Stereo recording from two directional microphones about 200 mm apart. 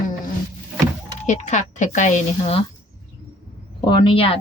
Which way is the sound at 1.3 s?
35° left (ahead or behind).